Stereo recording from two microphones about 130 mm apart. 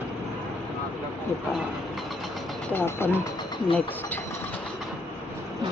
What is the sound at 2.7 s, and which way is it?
Speech, 15° left (ahead or behind).